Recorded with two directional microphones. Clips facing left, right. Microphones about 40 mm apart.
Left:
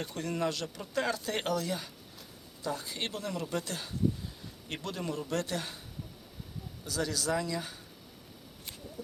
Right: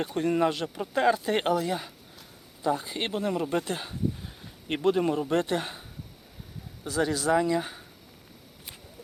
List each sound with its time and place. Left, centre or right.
0.0 s speech: right
6.8 s speech: right